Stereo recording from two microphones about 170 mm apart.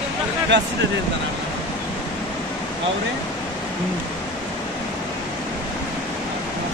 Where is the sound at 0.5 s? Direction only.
90° right.